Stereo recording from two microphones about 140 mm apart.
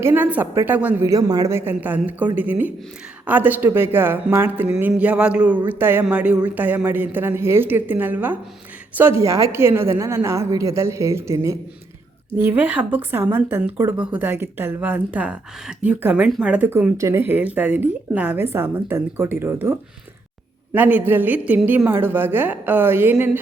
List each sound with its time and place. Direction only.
0.0 s a woman's voice: 10° right (ahead or behind)
20.7 s speech: 10° right (ahead or behind)